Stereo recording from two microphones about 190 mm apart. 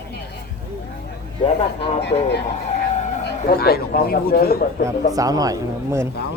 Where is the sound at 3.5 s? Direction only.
55° left (ahead or behind).